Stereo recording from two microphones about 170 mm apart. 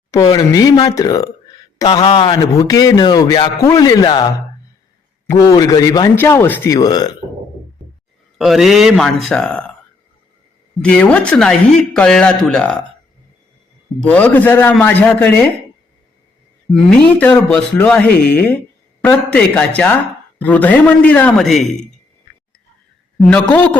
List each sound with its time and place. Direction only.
0.1 s a man's voice: 20° left (ahead or behind)
5.3 s a man's voice: 20° left (ahead or behind)
8.4 s speech: centre (ahead or behind)
10.8 s speech: 5° left (ahead or behind)
14.0 s a man's voice: 5° left (ahead or behind)
16.7 s a man's voice: 5° left (ahead or behind)
23.1 s a man's voice: 5° left (ahead or behind)